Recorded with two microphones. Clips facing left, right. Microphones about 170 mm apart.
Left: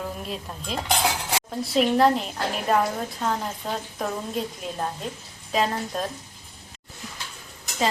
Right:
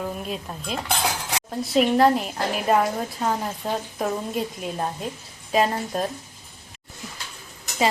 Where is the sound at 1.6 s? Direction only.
Centre (ahead or behind).